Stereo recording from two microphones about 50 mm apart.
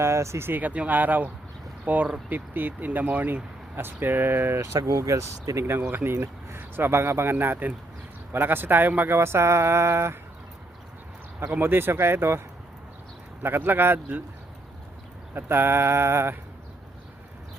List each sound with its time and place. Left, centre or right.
0.0 s speech: right
0.4 s a man's voice: right
0.7 s speech: right
3.8 s a man's voice: right
4.6 s speech: right
5.9 s a man's voice: right
9.1 s mantra: right
11.6 s a man's voice: right
13.4 s a man's voice: right
15.4 s a man's voice: right